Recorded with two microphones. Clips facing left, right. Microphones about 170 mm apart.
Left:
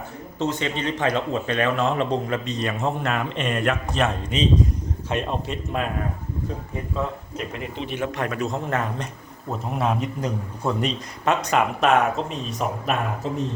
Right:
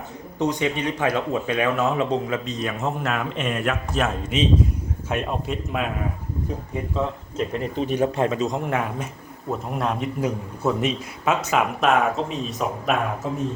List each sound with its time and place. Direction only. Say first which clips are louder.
0.3 s speech: right 2 dB; 15° right (ahead or behind)
7.5 s speech: right 7 dB; 40° right (ahead or behind); by 9.0 s 10° right (ahead or behind)
9.5 s speech: left 1 dB; centre (ahead or behind)